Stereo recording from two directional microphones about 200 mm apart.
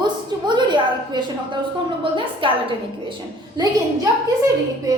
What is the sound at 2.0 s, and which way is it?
A woman's voice, 25° right (ahead or behind).